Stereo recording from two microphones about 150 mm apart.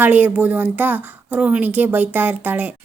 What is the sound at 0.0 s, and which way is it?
Speech, 10° right (ahead or behind).